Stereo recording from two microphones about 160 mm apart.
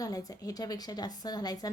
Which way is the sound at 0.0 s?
20° left (ahead or behind).